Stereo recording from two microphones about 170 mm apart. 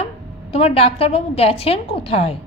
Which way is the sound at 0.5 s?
35° left (ahead or behind).